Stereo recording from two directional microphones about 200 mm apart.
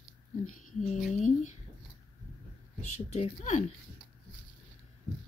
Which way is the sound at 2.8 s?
35° left (ahead or behind).